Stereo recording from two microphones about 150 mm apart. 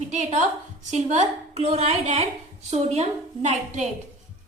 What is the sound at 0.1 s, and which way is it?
A woman's voice, 50° right (ahead or behind).